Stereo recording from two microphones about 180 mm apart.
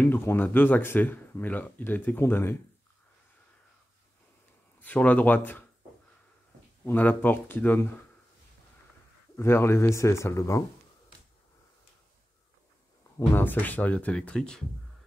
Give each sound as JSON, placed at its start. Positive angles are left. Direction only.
{"t": 0.0, "sound": "speech", "side_deg": 10}
{"t": 4.8, "sound": "speech", "side_deg": 10}
{"t": 6.9, "sound": "speech", "side_deg": 10}
{"t": 9.4, "sound": "speech", "side_deg": 15}
{"t": 13.3, "sound": "speech", "side_deg": 10}